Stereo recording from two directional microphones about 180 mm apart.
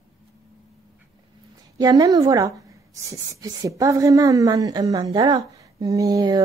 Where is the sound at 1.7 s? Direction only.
20° right (ahead or behind).